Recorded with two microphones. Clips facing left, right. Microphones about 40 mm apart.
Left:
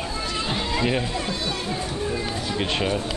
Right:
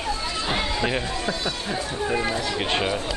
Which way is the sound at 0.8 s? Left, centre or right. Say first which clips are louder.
Left 1 dB; centre.